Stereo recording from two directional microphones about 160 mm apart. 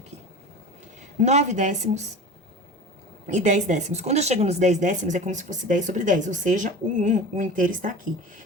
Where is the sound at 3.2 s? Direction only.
50° right (ahead or behind).